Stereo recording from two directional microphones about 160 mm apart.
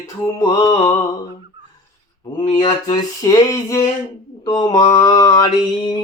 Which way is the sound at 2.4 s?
45° left (ahead or behind).